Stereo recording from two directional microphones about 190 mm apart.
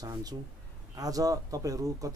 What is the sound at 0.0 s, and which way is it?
Speech, 20° right (ahead or behind).